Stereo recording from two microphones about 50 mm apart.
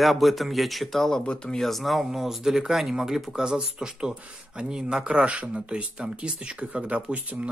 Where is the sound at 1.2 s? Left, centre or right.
Centre.